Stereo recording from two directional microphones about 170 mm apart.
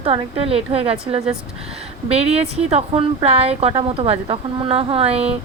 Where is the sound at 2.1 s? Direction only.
35° right (ahead or behind).